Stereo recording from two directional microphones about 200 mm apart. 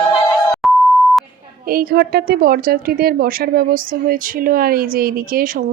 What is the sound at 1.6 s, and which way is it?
A woman's voice, 45° right (ahead or behind).